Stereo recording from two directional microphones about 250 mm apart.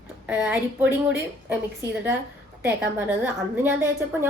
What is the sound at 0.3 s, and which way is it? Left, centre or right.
Speech, centre.